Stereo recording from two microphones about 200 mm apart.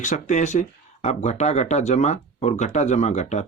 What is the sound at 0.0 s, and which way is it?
Speech, 35° left (ahead or behind).